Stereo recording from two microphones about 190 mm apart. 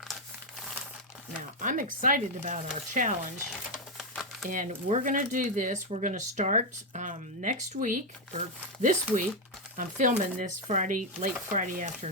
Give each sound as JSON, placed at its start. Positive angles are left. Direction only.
{"t": 1.6, "sound": "speech", "side_deg": -45}
{"t": 3.7, "sound": "a sound", "side_deg": 0}
{"t": 4.4, "sound": "speech", "side_deg": -45}